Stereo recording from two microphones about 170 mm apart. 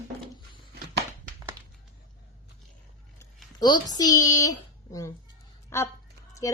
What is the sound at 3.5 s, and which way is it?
Speech, 25° left (ahead or behind).